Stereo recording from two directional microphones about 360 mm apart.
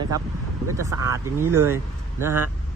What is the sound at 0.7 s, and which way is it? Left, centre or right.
Speech, centre.